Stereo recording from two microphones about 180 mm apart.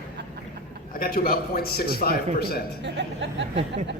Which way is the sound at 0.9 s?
55° left (ahead or behind).